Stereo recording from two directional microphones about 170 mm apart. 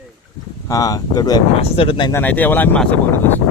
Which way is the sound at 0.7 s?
20° left (ahead or behind).